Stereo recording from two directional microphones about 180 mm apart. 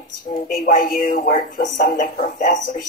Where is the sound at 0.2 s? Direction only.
50° left (ahead or behind).